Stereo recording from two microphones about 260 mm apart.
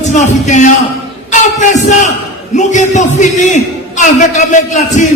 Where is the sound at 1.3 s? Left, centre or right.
Left.